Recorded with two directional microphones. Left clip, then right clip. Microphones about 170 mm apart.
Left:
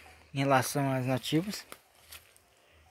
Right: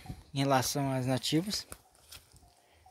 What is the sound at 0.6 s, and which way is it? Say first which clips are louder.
Speech: left 2 dB; 5° right (ahead or behind).